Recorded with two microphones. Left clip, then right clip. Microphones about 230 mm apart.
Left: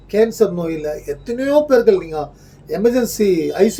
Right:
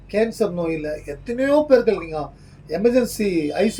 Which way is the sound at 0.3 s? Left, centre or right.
Left.